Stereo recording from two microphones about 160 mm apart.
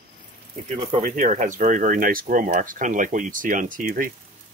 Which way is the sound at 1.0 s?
50° right (ahead or behind).